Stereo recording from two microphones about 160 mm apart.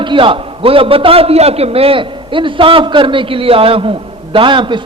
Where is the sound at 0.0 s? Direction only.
30° right (ahead or behind).